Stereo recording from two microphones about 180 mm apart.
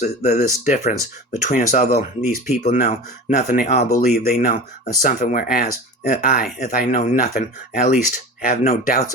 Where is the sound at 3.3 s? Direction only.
60° left (ahead or behind).